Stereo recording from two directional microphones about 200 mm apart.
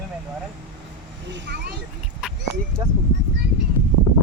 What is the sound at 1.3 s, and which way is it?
Vehicle, 60° right (ahead or behind).